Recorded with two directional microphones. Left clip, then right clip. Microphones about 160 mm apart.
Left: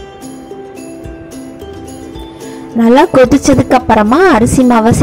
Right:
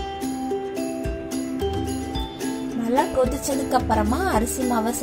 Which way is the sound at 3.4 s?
45° left (ahead or behind).